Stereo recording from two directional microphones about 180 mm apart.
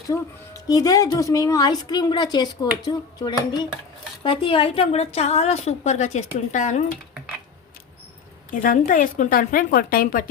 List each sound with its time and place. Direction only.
0.1 s a woman's voice: 20° left (ahead or behind); by 6.8 s 40° left (ahead or behind)
8.4 s a woman's voice: 50° left (ahead or behind)